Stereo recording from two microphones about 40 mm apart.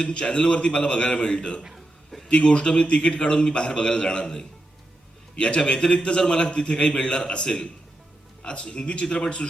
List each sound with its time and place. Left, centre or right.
0.0 s a man's voice: left
5.6 s a man's voice: left